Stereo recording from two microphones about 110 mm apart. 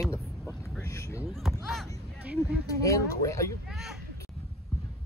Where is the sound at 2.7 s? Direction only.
30° left (ahead or behind).